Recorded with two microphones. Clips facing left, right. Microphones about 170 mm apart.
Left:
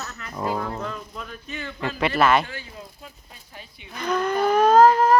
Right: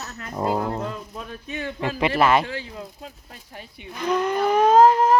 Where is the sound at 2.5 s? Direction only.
90° right.